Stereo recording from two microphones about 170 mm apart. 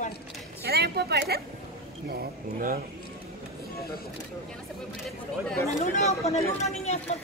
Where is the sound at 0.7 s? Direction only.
70° right (ahead or behind).